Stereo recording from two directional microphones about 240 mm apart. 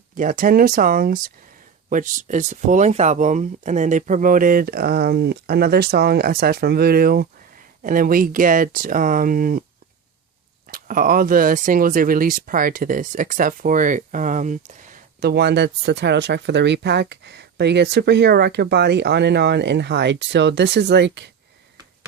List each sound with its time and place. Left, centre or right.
0.2 s speech: right
10.7 s speech: right